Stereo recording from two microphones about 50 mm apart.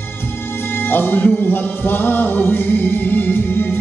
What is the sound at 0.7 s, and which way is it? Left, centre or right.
Music, left.